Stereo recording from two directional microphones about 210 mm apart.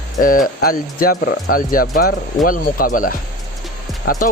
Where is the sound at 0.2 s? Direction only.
40° left (ahead or behind).